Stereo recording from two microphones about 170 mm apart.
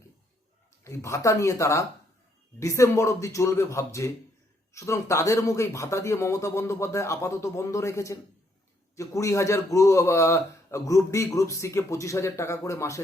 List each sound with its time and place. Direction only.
0.9 s a man's voice: 15° left (ahead or behind)